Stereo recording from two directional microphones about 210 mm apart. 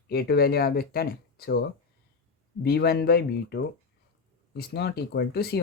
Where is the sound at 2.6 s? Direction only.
50° left (ahead or behind).